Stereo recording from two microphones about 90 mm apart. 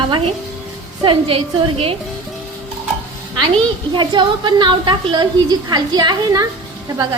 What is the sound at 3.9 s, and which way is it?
A woman's voice, 60° right (ahead or behind).